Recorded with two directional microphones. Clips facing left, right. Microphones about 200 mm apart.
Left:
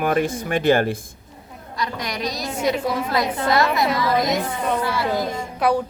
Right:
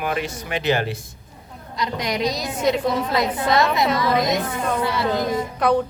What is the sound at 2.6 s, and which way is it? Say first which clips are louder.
Speech: right 1 dB; 5° left (ahead or behind).